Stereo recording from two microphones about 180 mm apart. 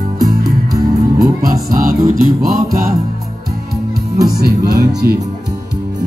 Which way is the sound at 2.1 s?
55° right (ahead or behind).